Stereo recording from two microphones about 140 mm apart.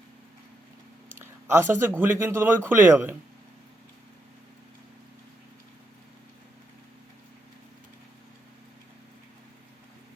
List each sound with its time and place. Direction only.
1.2 s speech: 15° right (ahead or behind)